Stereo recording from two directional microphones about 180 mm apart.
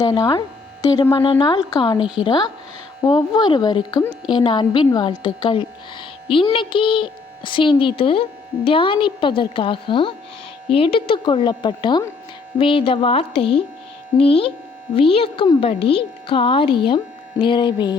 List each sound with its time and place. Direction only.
0.0 s a woman's voice: 20° left (ahead or behind)